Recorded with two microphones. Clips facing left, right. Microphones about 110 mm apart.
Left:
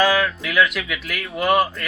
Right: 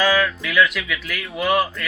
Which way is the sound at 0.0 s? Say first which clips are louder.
Left 1 dB; 5° left (ahead or behind).